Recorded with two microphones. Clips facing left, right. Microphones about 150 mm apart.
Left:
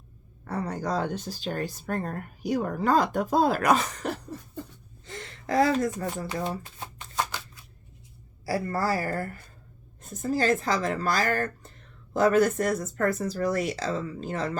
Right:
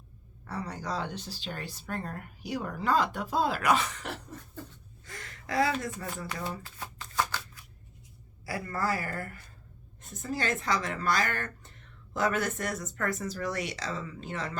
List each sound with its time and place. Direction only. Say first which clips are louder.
0.4 s speech: left 6 dB; 50° left (ahead or behind)
5.0 s shuffling cards: left 7 dB; 25° left (ahead or behind)
8.4 s speech: left 5 dB; 35° left (ahead or behind)